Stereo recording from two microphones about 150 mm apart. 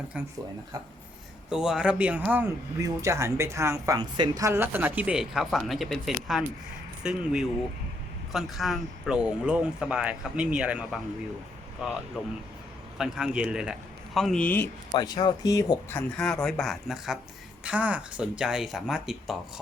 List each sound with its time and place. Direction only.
0.1 s a woman's voice: 10° right (ahead or behind)
1.5 s a woman's voice: 5° right (ahead or behind)
13.0 s speech: 5° right (ahead or behind); by 14.7 s 10° left (ahead or behind)
14.9 s speech: 30° left (ahead or behind)
16.0 s speech: 5° left (ahead or behind)